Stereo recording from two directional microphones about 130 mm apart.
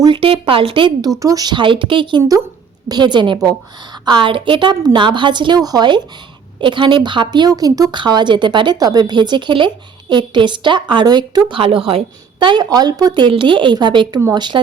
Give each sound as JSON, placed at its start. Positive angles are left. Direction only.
{"t": 0.0, "sound": "speech", "side_deg": -40}
{"t": 1.2, "sound": "a woman's voice", "side_deg": -30}